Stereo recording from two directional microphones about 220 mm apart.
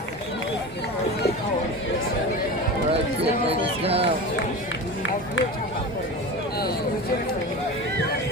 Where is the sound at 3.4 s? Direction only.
25° right (ahead or behind).